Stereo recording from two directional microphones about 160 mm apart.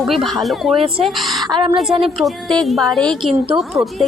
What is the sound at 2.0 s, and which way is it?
Speech, centre (ahead or behind).